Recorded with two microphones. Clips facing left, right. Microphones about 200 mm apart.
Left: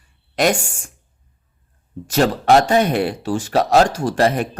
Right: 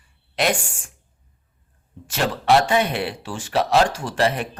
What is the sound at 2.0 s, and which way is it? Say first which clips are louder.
A man's voice: left 6 dB; 40° left (ahead or behind).